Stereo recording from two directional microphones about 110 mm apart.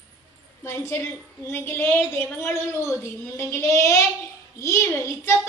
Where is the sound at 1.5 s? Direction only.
20° left (ahead or behind).